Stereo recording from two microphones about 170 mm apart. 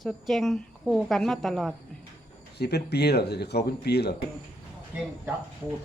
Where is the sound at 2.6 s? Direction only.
75° left (ahead or behind).